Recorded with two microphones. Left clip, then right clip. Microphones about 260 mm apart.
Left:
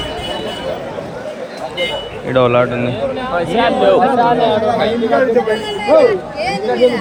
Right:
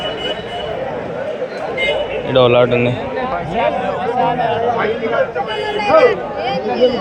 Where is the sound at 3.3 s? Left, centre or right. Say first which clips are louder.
Left 4 dB; left.